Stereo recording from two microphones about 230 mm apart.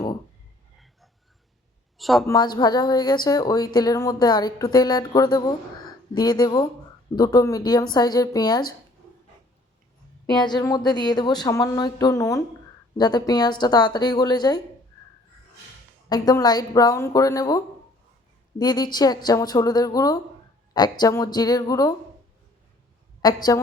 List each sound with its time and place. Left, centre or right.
2.0 s a man's voice: centre
2.2 s speech: centre
10.4 s speech: centre
16.0 s speech: centre
18.6 s speech: centre
23.2 s speech: centre